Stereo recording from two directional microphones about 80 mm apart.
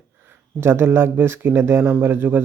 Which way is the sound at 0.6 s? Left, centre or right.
Right.